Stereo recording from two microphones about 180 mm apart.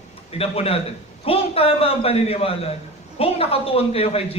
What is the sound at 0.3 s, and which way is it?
A man's voice, 35° left (ahead or behind).